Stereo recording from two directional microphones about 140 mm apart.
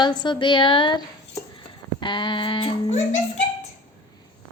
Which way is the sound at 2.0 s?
35° left (ahead or behind).